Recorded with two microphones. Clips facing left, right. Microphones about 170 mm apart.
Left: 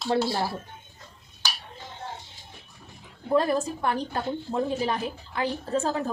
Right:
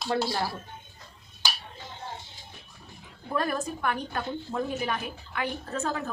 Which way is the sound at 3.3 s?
25° left (ahead or behind).